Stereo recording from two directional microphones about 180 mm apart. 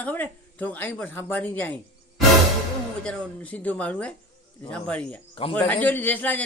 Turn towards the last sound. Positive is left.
turn(degrees=10)  # may be behind; listen again after turning